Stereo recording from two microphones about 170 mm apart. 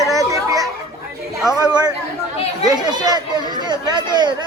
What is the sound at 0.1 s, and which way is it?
Children playing, 20° right (ahead or behind).